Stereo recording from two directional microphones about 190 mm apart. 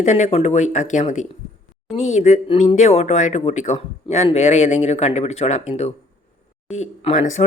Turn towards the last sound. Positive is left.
turn(degrees=35)  # may be behind; listen again after turning